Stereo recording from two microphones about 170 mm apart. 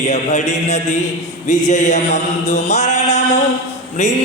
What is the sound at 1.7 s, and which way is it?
Chant, 45° left (ahead or behind).